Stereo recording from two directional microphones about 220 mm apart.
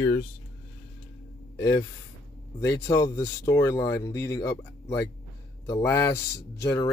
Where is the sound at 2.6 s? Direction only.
15° left (ahead or behind).